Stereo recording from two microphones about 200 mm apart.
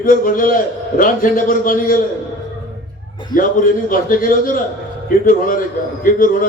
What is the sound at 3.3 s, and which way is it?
A man's voice, 45° left (ahead or behind).